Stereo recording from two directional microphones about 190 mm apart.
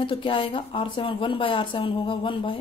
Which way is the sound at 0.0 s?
25° left (ahead or behind).